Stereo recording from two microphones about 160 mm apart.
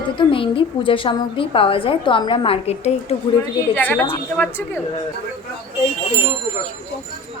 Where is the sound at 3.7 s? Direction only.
10° left (ahead or behind).